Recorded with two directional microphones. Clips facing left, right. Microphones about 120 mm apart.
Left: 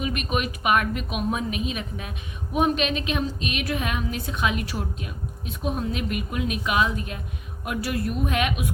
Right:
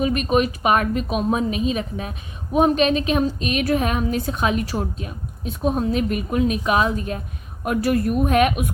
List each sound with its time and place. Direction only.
0.0 s a woman's voice: 35° right (ahead or behind)